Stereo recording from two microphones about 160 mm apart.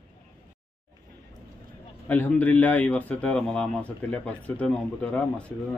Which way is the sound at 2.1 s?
10° left (ahead or behind).